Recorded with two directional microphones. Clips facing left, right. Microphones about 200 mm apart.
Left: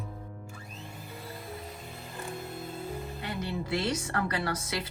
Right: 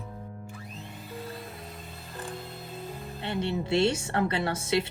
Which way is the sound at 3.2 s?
25° right (ahead or behind).